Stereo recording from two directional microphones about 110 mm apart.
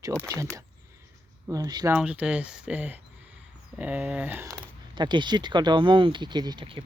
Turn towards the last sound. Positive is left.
turn(degrees=-40)  # may be behind; listen again after turning